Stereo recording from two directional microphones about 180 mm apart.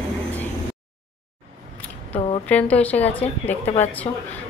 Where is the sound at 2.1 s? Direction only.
30° left (ahead or behind).